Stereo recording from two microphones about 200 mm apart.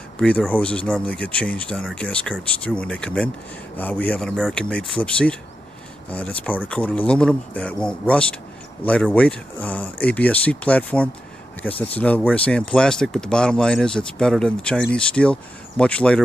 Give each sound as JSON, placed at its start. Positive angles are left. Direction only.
{"t": 0.2, "sound": "speech", "side_deg": 5}